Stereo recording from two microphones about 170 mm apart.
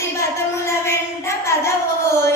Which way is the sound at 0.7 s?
15° left (ahead or behind).